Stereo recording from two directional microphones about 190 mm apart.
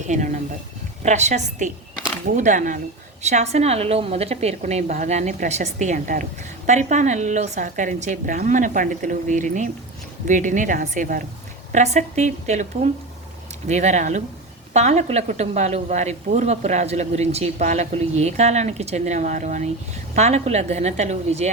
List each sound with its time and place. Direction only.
1.0 s a woman's voice: 35° right (ahead or behind)